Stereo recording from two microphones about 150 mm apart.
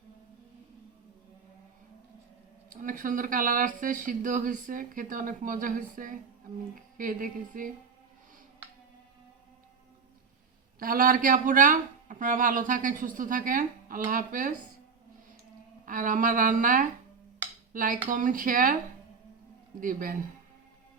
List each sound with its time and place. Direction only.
2.6 s speech: 60° right (ahead or behind)
10.8 s speech: 70° right (ahead or behind)
15.9 s speech: 60° right (ahead or behind)
19.8 s speech: 65° right (ahead or behind)